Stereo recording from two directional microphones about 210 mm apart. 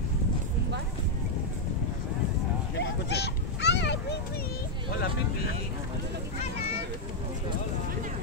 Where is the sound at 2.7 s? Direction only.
55° left (ahead or behind).